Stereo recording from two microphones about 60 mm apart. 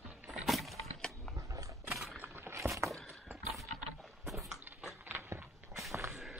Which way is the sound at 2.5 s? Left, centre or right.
Right.